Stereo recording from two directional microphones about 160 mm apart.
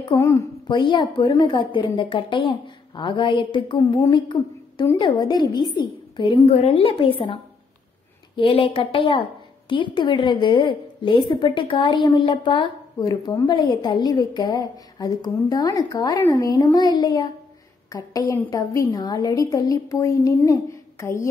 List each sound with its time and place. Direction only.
0.1 s a woman's voice: 20° left (ahead or behind)
6.5 s a woman's voice: 40° left (ahead or behind)
8.4 s a woman's voice: 35° left (ahead or behind); by 21.3 s 15° left (ahead or behind)